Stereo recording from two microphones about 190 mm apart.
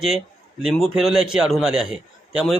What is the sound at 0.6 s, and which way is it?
A man's voice, centre (ahead or behind).